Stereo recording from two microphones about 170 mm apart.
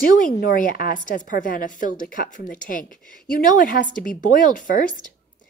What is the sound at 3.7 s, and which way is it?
Speech, 50° left (ahead or behind).